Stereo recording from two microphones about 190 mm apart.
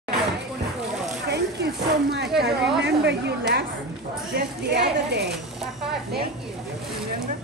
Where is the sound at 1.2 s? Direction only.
60° right (ahead or behind).